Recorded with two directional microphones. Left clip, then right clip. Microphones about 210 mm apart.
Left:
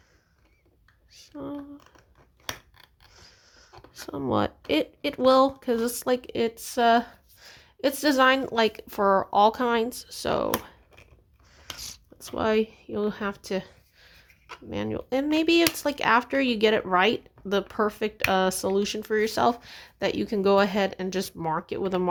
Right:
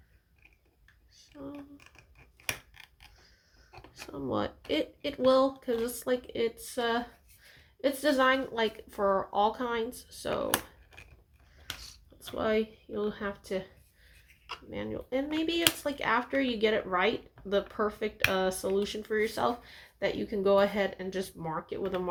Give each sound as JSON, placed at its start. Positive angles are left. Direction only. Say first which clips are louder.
{"t": 1.1, "sound": "a sound", "louder": "left 8 dB", "side_deg": 45}
{"t": 2.7, "sound": "a sound", "louder": "right 2 dB", "side_deg": 0}
{"t": 3.2, "sound": "pig", "louder": "left 9 dB", "side_deg": 50}
{"t": 3.9, "sound": "speech", "louder": "left 7 dB", "side_deg": 45}
{"t": 12.4, "sound": "speech", "louder": "left 5 dB", "side_deg": 50}
{"t": 14.7, "sound": "speech", "louder": "left 6 dB", "side_deg": 50}